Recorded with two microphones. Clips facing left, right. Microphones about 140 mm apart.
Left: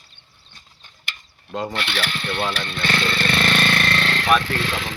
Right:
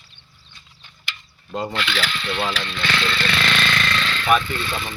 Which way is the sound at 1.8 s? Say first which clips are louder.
Right 1 dB; 55° left (ahead or behind).